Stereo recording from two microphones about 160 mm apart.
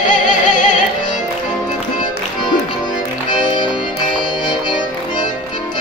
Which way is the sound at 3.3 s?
30° left (ahead or behind).